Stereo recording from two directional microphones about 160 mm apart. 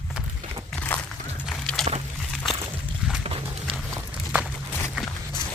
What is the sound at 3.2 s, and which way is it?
Clip-clop, 40° right (ahead or behind).